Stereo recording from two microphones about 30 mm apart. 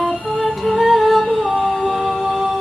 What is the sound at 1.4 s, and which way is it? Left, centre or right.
Music, right.